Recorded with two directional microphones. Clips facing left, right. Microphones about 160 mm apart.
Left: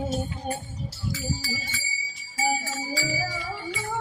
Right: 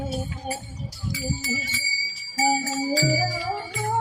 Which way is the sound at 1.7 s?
30° right (ahead or behind).